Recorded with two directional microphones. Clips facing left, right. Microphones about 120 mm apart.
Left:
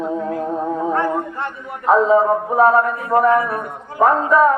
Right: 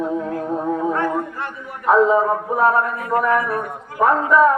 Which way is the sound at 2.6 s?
25° left (ahead or behind).